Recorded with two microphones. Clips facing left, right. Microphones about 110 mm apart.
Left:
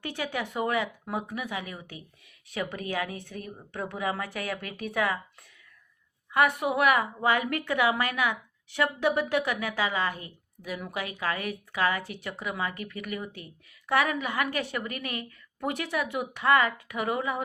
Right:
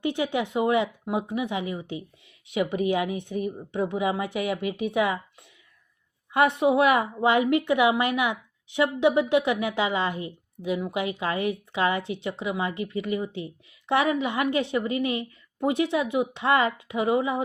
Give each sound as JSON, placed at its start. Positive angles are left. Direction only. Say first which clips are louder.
{"t": 0.0, "sound": "a woman's voice", "louder": "right 7 dB", "side_deg": -20}